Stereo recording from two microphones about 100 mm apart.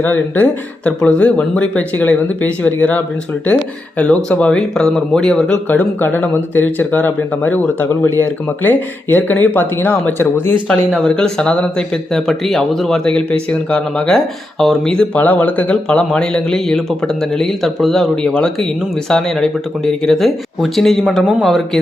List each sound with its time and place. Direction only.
0.0 s speech: 20° left (ahead or behind)
10.7 s speech: 10° left (ahead or behind)